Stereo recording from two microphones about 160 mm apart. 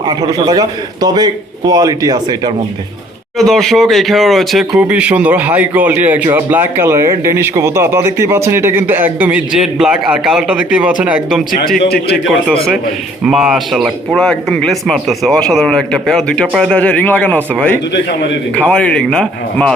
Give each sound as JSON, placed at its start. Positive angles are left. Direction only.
{"t": 0.2, "sound": "a man's voice", "side_deg": -20}
{"t": 3.3, "sound": "speech", "side_deg": 0}
{"t": 11.8, "sound": "a man's voice", "side_deg": 90}
{"t": 13.2, "sound": "a man's voice", "side_deg": -5}